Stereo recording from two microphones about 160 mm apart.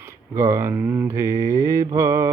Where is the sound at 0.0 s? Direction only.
15° right (ahead or behind).